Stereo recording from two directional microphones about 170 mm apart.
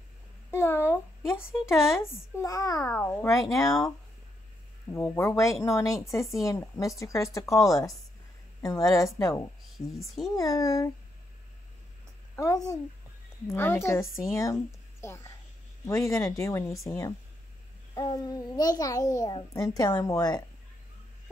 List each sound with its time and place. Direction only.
0.5 s speech: 15° left (ahead or behind)
2.9 s speech: 10° left (ahead or behind)
3.5 s a child's voice: 20° left (ahead or behind)
4.9 s a child's voice: 15° left (ahead or behind)
9.9 s speech: centre (ahead or behind)
10.3 s a child's voice: 20° left (ahead or behind)
12.4 s a child's voice: 20° left (ahead or behind)